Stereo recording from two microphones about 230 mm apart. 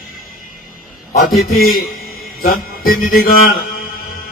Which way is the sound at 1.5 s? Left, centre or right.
Left.